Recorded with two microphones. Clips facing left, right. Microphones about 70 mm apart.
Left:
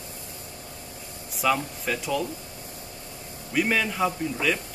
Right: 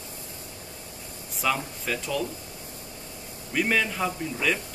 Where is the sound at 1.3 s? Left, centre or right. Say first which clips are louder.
Left 3 dB; centre.